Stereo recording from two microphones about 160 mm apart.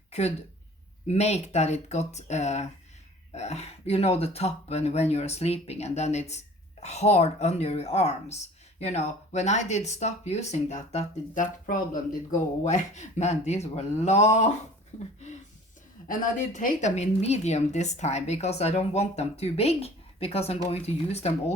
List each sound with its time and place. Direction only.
0.1 s a woman's voice: 40° left (ahead or behind)